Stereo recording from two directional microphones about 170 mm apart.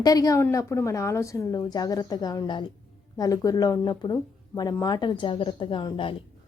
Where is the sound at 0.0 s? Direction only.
20° left (ahead or behind).